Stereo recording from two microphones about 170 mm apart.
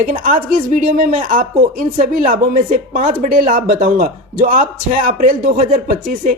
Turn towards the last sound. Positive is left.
turn(degrees=-55)  # may be behind; listen again after turning